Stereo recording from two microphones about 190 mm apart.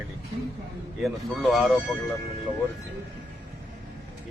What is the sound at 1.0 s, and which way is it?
Speech, centre (ahead or behind).